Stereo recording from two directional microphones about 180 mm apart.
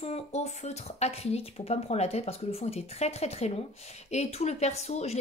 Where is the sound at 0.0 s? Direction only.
35° left (ahead or behind).